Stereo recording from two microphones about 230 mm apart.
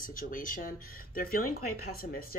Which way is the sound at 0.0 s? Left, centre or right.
Left.